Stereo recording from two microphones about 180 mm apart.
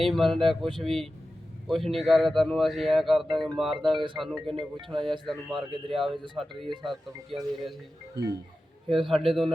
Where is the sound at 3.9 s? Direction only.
25° right (ahead or behind).